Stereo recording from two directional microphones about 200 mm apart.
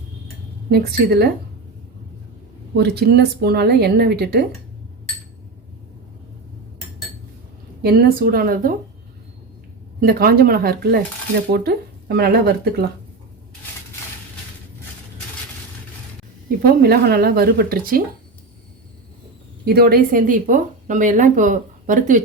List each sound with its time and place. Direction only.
0.7 s a woman's voice: 50° right (ahead or behind)
2.7 s a woman's voice: 55° right (ahead or behind)
7.8 s a woman's voice: 50° right (ahead or behind)
10.0 s a woman's voice: 45° right (ahead or behind)
16.6 s a woman's voice: 50° right (ahead or behind)
19.6 s speech: 50° right (ahead or behind)